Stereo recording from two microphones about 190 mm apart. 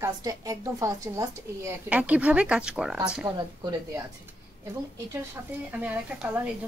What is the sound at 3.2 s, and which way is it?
Speech, 20° right (ahead or behind).